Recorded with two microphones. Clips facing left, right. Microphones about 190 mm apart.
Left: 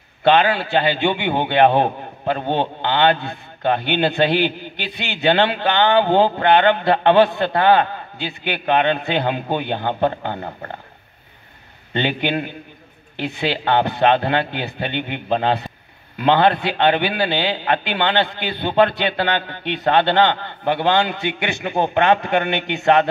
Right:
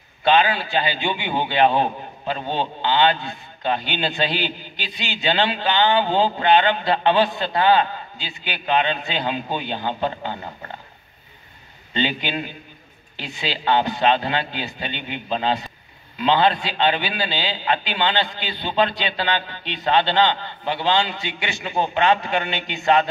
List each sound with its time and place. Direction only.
0.2 s a man's voice: 60° left (ahead or behind)
11.9 s a man's voice: 55° left (ahead or behind)